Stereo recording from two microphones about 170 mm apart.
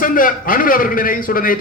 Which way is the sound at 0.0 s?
55° left (ahead or behind).